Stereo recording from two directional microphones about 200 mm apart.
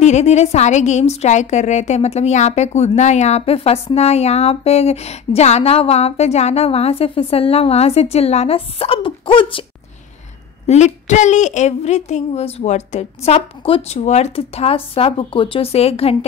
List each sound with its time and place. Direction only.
0.0 s speech: 35° left (ahead or behind)
10.7 s speech: 35° left (ahead or behind)